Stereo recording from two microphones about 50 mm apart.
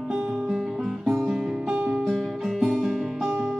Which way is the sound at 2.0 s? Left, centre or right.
Centre.